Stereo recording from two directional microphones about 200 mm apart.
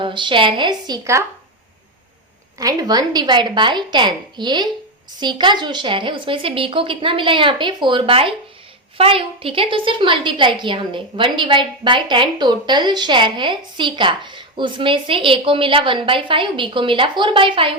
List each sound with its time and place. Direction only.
0.0 s a woman's voice: 25° right (ahead or behind)
2.6 s a woman's voice: 20° right (ahead or behind)